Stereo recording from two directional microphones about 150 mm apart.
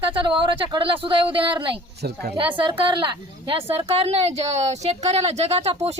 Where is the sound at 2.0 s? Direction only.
90° right.